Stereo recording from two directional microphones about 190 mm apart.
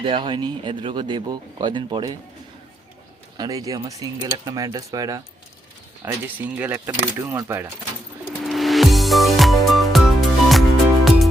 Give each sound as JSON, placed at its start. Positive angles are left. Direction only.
{"t": 0.0, "sound": "speech", "side_deg": -25}
{"t": 3.3, "sound": "speech", "side_deg": -20}
{"t": 8.4, "sound": "music", "side_deg": 0}